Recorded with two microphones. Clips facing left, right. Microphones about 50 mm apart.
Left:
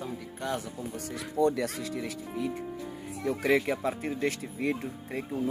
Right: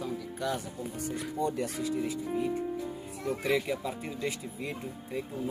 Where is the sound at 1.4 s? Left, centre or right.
Left.